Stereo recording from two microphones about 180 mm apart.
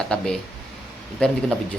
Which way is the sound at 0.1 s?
5° left (ahead or behind).